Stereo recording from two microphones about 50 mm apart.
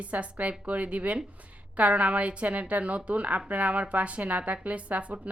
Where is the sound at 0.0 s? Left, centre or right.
Right.